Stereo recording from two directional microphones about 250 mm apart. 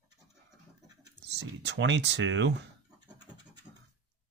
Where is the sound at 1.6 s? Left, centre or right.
Right.